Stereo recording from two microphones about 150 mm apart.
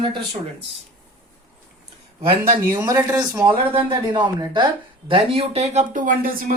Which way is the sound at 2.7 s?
25° right (ahead or behind).